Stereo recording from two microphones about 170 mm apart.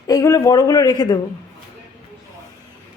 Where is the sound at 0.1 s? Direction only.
20° left (ahead or behind).